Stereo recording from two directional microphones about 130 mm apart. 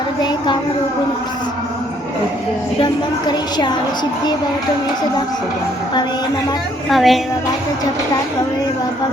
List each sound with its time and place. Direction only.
0.2 s a sound: 35° left (ahead or behind)
2.8 s a woman's voice: 35° left (ahead or behind)
6.9 s a woman's voice: centre (ahead or behind)